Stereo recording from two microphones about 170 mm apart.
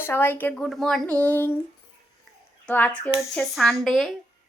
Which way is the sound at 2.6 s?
10° left (ahead or behind).